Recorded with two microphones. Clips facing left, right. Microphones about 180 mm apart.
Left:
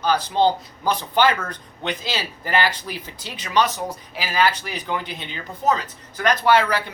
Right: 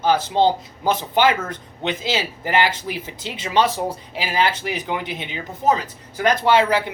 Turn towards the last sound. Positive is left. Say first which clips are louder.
# right 1 dB
turn(degrees=-20)  # may be behind; listen again after turning